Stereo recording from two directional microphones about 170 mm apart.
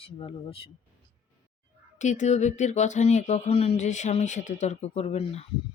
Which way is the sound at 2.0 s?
45° left (ahead or behind).